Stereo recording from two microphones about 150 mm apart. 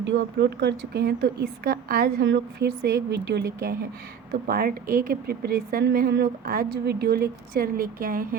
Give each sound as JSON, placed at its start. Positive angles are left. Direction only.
{"t": 0.3, "sound": "speech", "side_deg": -90}
{"t": 4.4, "sound": "speech", "side_deg": -80}